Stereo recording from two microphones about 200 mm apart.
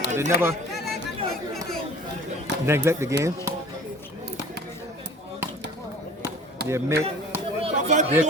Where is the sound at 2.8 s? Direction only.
15° right (ahead or behind).